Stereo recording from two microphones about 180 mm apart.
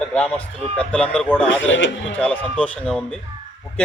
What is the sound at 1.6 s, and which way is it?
Speech, 90° left.